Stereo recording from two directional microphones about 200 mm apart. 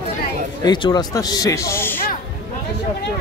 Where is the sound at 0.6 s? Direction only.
20° left (ahead or behind).